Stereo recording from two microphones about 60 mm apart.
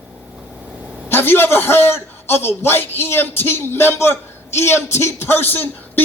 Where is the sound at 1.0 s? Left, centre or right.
Left.